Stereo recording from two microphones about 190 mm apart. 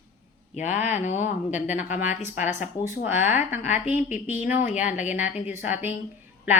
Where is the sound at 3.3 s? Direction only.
10° right (ahead or behind).